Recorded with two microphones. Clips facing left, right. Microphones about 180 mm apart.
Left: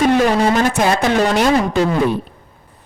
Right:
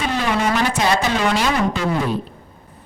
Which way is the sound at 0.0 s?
45° left (ahead or behind).